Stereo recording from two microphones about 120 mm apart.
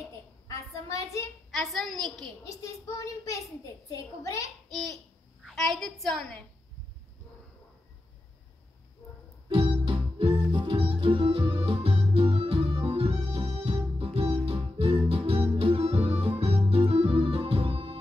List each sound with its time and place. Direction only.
0.5 s a sound: 25° left (ahead or behind)
1.5 s a woman's voice: centre (ahead or behind)
2.4 s a child's voice: 25° left (ahead or behind)
4.6 s a child's voice: centre (ahead or behind)
9.5 s music: 45° right (ahead or behind)